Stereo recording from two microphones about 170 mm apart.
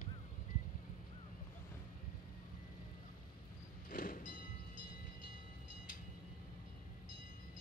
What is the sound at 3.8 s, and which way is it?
Train, 55° left (ahead or behind).